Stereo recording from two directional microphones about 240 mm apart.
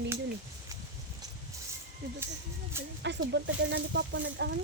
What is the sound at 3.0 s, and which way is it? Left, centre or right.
Speech, right.